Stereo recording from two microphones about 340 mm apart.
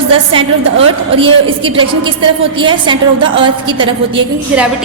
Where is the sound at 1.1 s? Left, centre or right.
Centre.